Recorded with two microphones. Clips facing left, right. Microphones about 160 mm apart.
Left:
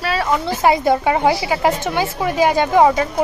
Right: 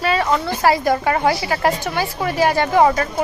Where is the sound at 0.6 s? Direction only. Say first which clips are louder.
Left 2 dB; 20° left (ahead or behind).